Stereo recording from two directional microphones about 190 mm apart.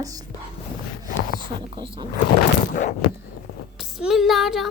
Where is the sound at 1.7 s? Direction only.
25° right (ahead or behind).